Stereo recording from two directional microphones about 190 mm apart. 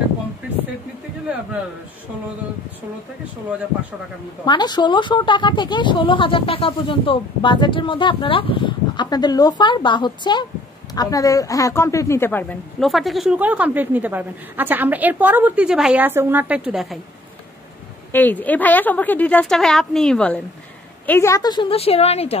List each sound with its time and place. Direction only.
4.5 s a woman's voice: 20° left (ahead or behind); by 17.0 s 5° right (ahead or behind)
18.1 s a woman's voice: 10° left (ahead or behind); by 22.4 s 35° left (ahead or behind)